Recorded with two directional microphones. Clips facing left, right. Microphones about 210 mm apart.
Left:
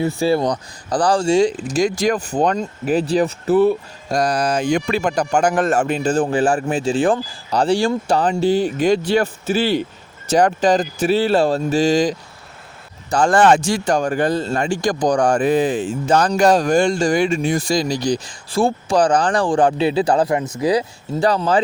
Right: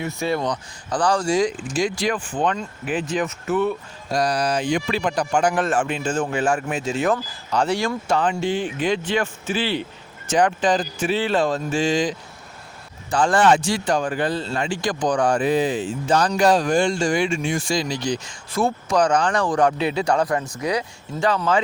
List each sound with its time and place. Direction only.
0.0 s speech: 30° left (ahead or behind)